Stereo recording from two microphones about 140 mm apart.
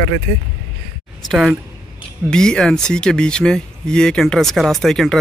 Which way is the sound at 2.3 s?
5° left (ahead or behind).